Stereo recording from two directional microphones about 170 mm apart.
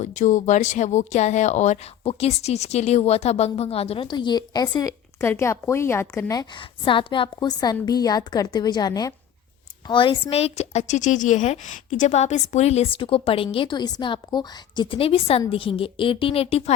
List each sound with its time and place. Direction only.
0.0 s a woman's voice: 45° left (ahead or behind)